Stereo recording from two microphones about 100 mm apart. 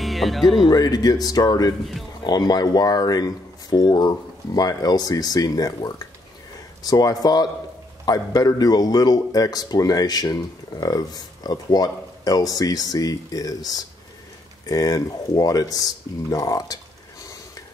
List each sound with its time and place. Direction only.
0.0 s speech: centre (ahead or behind)
0.7 s speech: 40° left (ahead or behind)